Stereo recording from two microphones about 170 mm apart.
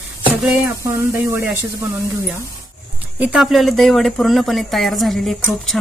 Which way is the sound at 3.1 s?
5° right (ahead or behind).